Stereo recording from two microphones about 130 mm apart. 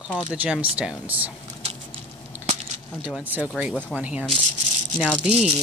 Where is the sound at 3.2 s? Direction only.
15° right (ahead or behind).